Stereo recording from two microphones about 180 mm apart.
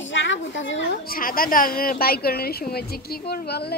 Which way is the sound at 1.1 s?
50° left (ahead or behind).